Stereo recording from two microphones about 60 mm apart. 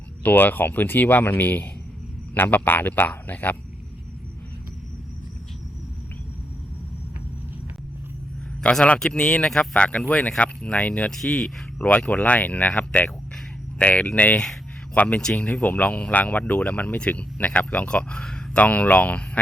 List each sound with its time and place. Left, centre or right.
0.2 s speech: left
8.6 s speech: centre
15.2 s speech: centre
15.4 s speech: left
18.5 s speech: left